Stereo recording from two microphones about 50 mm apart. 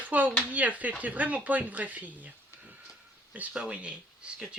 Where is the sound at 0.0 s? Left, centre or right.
Right.